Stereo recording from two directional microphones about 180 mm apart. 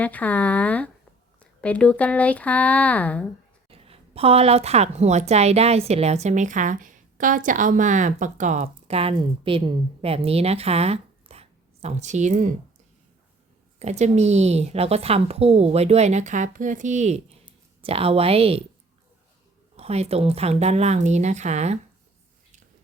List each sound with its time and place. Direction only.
0.0 s speech: 10° left (ahead or behind)
3.7 s a woman's voice: 30° right (ahead or behind)
13.7 s a woman's voice: 40° right (ahead or behind)
19.7 s a woman's voice: 35° right (ahead or behind)